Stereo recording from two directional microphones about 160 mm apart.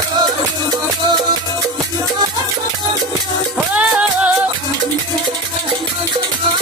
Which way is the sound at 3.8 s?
10° right (ahead or behind).